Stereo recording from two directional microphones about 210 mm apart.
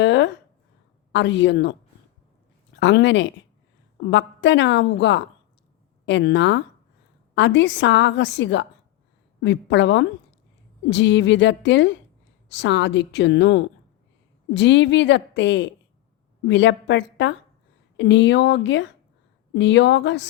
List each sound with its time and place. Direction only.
0.0 s a woman's voice: 60° left (ahead or behind)
2.7 s a woman's voice: 55° left (ahead or behind)